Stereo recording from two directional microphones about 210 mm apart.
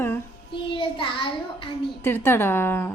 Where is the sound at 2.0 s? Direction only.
10° left (ahead or behind).